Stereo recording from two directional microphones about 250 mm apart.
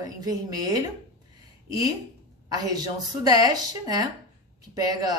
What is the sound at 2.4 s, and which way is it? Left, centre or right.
A woman's voice, centre.